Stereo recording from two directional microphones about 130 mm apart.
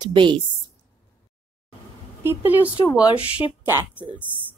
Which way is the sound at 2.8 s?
40° left (ahead or behind).